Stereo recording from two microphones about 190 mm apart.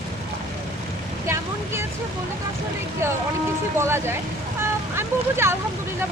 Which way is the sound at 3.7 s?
15° right (ahead or behind).